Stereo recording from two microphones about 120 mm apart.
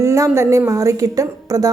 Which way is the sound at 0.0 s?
25° right (ahead or behind).